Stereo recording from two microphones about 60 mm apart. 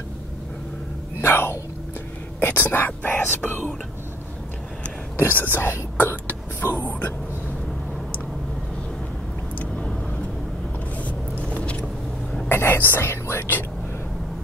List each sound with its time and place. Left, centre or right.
1.2 s a sound: left
2.4 s speech: left
5.1 s speech: left
6.8 s speech: left
12.4 s speech: left